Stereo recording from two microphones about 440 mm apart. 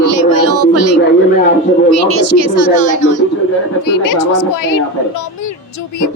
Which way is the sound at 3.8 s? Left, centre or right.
Left.